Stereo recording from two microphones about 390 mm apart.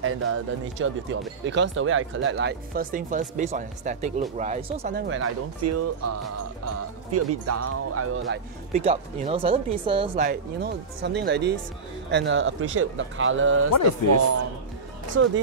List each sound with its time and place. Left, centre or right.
0.0 s speech: right
8.7 s speech: centre